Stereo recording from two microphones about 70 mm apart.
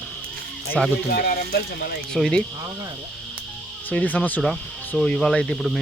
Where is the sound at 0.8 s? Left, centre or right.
Centre.